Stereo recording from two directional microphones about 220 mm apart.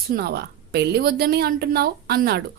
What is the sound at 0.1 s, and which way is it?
A woman's voice, 45° right (ahead or behind).